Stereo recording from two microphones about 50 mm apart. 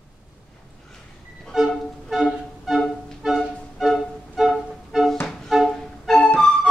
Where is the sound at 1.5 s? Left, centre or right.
Centre.